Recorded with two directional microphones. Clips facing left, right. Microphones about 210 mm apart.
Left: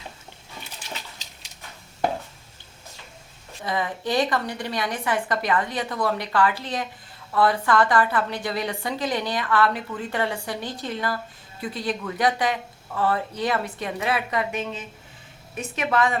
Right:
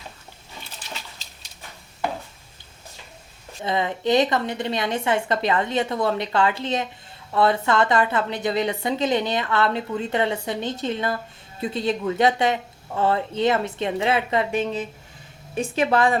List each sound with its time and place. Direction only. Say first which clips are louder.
3.6 s a woman's voice: right 3 dB; 25° right (ahead or behind)